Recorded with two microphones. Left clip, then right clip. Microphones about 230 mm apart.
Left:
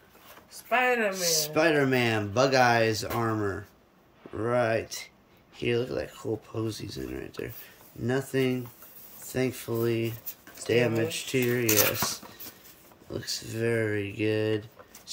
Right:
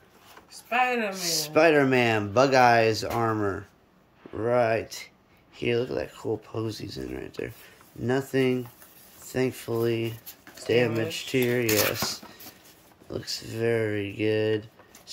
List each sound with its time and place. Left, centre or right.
0.5 s speech: centre
1.1 s speech: centre